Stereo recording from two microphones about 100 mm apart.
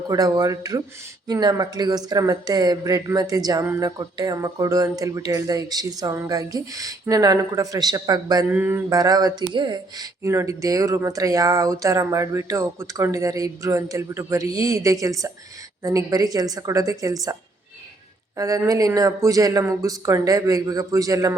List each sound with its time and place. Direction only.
0.1 s speech: 35° right (ahead or behind)
8.4 s mantra: 15° right (ahead or behind)
8.9 s speech: 40° right (ahead or behind)
10.2 s speech: 30° right (ahead or behind)
18.3 s speech: 35° right (ahead or behind)